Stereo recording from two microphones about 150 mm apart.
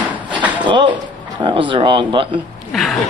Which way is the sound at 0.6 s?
30° right (ahead or behind).